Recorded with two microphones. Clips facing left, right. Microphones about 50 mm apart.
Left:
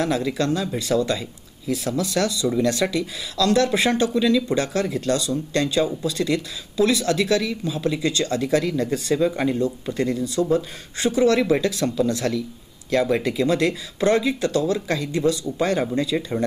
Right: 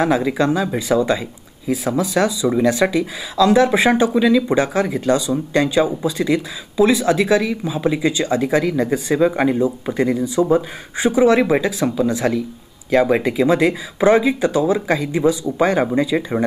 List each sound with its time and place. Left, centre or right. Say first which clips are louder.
0.0 s speech: right 5 dB; centre